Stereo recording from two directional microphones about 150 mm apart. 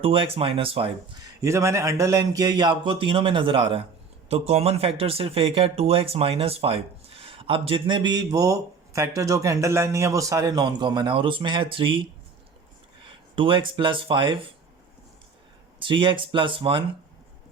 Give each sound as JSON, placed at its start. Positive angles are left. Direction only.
{"t": 0.0, "sound": "speech", "side_deg": -40}
{"t": 1.2, "sound": "speech", "side_deg": -20}
{"t": 13.1, "sound": "speech", "side_deg": -35}
{"t": 15.8, "sound": "speech", "side_deg": -35}